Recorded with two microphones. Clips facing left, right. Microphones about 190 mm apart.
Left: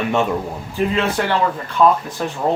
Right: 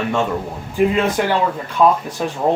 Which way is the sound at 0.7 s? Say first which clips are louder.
Right 3 dB; 15° right (ahead or behind).